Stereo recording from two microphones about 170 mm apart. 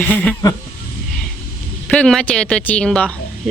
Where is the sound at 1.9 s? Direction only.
5° left (ahead or behind).